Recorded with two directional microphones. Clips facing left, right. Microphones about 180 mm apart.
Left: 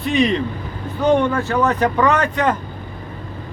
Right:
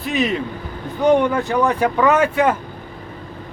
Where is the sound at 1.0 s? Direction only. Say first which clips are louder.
Right 1 dB; 15° right (ahead or behind).